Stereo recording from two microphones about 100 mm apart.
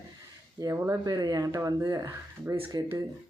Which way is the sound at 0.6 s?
35° right (ahead or behind).